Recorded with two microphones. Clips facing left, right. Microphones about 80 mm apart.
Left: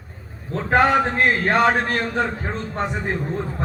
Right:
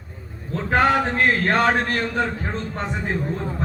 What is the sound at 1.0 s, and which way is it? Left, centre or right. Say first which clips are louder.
Speech: even; centre.